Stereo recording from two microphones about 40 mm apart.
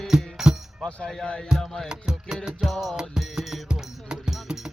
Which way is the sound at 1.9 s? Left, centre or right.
Centre.